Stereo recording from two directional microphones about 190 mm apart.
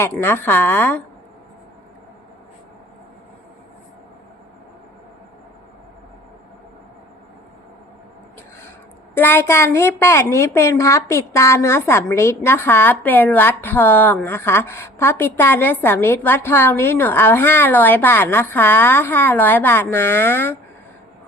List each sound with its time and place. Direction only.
0.0 s a woman's voice: 10° left (ahead or behind)
9.1 s a woman's voice: 10° left (ahead or behind)